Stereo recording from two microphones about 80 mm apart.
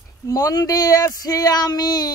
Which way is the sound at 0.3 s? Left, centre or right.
Left.